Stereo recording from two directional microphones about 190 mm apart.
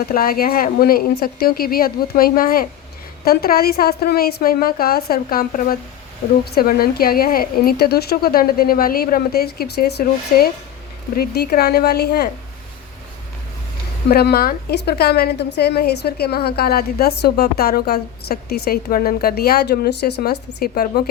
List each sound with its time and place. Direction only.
0.0 s a woman's voice: 50° left (ahead or behind)
14.1 s a woman's voice: 55° left (ahead or behind)